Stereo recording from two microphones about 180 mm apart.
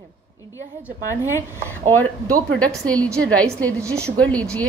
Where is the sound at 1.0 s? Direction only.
15° left (ahead or behind).